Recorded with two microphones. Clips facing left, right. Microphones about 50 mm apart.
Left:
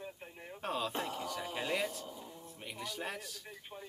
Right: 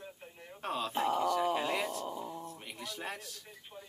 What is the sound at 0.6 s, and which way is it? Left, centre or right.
Speech, centre.